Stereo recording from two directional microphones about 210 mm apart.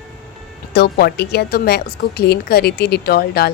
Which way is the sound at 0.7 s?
50° left (ahead or behind).